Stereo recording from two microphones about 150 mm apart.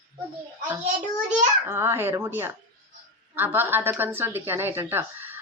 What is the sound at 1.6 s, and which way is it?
A woman's voice, 15° right (ahead or behind).